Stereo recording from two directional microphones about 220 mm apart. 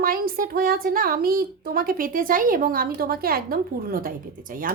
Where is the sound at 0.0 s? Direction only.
40° right (ahead or behind).